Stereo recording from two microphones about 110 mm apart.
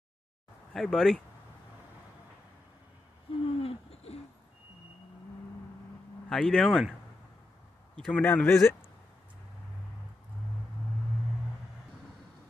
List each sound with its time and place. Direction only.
0.7 s speech: 5° left (ahead or behind)
3.4 s a sound: 65° left (ahead or behind)
6.2 s speech: 5° left (ahead or behind)
8.0 s speech: 10° left (ahead or behind)